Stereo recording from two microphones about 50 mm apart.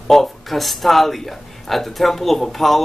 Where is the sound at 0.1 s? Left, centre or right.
Centre.